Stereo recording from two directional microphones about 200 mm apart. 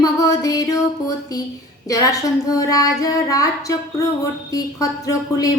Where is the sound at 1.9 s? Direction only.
15° left (ahead or behind).